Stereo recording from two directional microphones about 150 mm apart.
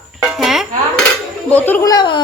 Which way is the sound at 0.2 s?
Centre (ahead or behind).